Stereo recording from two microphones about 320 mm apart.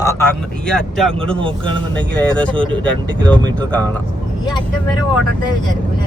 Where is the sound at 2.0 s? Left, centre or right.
Centre.